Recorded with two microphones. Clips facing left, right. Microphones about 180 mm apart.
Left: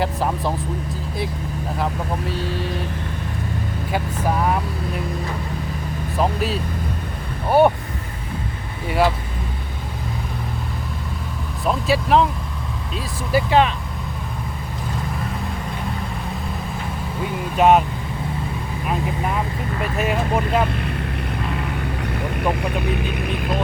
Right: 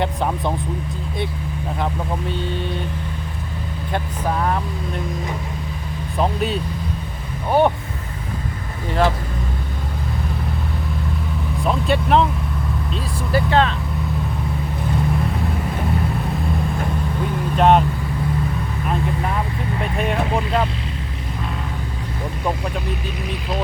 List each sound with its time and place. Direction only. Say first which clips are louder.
0.0 s speech: even; centre (ahead or behind)
1.8 s speech: even; 5° left (ahead or behind)
3.9 s speech: left 1 dB; 5° left (ahead or behind)
6.1 s speech: right 1 dB; centre (ahead or behind)
8.9 s speech: even; 10° left (ahead or behind)
11.6 s speech: even; centre (ahead or behind)
13.3 s speech: left 1 dB; 15° left (ahead or behind)
17.6 s speech: even; 5° left (ahead or behind)
19.8 s speech: even; 5° left (ahead or behind)
22.9 s speech: left 3 dB; 60° left (ahead or behind)